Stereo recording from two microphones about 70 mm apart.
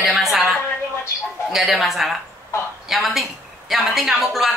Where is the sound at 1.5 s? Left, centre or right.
Centre.